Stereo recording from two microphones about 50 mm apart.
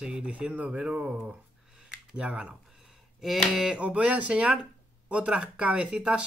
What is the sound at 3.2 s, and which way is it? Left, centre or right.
Speech, centre.